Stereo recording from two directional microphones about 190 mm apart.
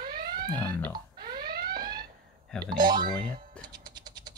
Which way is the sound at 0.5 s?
10° left (ahead or behind).